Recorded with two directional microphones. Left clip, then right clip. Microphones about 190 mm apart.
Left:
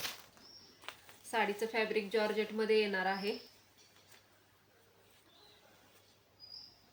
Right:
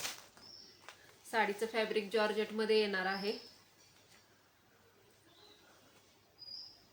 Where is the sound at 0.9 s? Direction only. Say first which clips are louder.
Left 7 dB; 45° left (ahead or behind).